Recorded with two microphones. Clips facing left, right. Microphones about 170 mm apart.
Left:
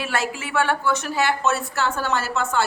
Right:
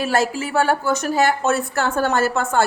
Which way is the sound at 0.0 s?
40° right (ahead or behind).